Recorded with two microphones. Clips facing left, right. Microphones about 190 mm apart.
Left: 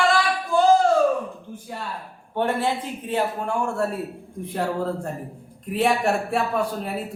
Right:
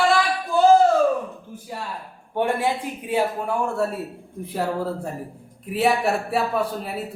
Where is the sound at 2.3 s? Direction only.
10° right (ahead or behind).